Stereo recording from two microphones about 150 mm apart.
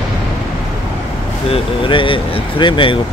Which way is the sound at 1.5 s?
35° left (ahead or behind).